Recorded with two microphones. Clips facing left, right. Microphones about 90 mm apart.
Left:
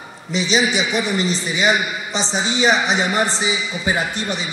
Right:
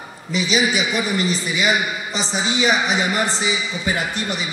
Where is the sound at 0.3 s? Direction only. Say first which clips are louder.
Left 1 dB; 25° left (ahead or behind).